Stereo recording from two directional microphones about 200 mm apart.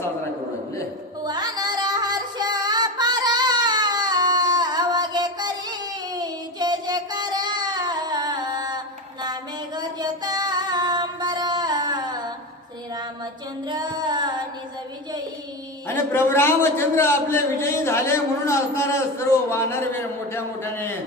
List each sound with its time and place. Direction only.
1.2 s music: 20° right (ahead or behind)
6.1 s a sound: 20° right (ahead or behind)
9.2 s female singing: 20° right (ahead or behind)
13.7 s child singing: 20° right (ahead or behind)
16.1 s a man's voice: 10° left (ahead or behind)